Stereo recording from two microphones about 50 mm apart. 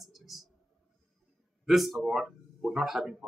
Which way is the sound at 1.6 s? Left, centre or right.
Centre.